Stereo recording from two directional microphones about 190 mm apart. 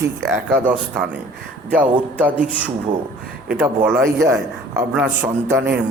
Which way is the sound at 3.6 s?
10° right (ahead or behind).